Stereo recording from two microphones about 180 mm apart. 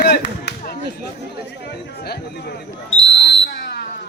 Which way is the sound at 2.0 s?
65° left (ahead or behind).